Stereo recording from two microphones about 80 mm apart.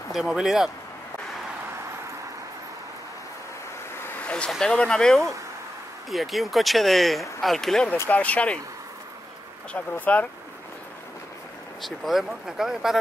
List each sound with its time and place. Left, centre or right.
0.1 s speech: centre
4.2 s vehicle: centre
4.5 s speech: centre
8.1 s speech: centre
9.7 s speech: centre
11.8 s speech: centre